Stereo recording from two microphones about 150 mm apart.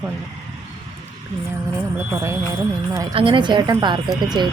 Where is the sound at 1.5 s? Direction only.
20° right (ahead or behind).